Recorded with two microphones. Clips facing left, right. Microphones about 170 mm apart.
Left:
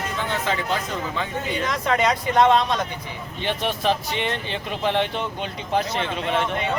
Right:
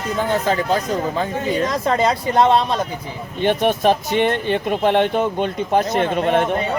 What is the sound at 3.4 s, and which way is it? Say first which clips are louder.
Speech: right 8 dB; 50° right (ahead or behind).